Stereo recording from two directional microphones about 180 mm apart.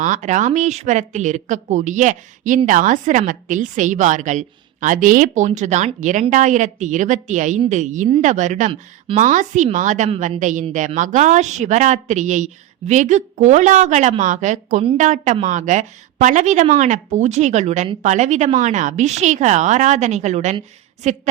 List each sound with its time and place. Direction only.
0.0 s a woman's voice: 45° right (ahead or behind)